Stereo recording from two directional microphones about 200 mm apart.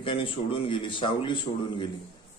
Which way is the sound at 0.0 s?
25° left (ahead or behind).